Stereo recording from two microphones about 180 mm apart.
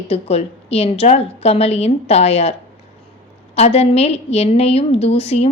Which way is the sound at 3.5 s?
35° left (ahead or behind).